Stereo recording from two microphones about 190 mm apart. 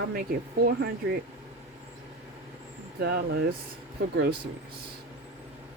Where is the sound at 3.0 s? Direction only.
60° right (ahead or behind).